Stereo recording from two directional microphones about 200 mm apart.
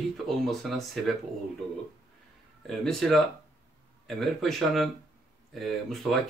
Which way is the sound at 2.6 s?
Centre (ahead or behind).